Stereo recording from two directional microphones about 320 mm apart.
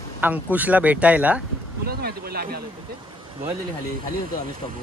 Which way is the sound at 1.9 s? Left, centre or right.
Right.